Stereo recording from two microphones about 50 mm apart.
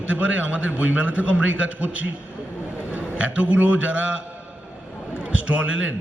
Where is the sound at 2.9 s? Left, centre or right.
Right.